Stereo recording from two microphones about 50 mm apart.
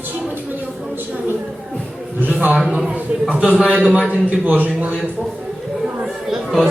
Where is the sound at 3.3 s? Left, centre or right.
Right.